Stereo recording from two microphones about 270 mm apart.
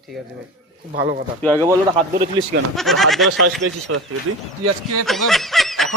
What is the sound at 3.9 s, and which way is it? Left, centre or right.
Speech, right.